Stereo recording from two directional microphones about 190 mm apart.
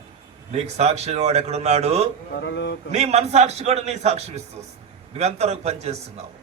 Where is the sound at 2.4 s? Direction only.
65° left (ahead or behind).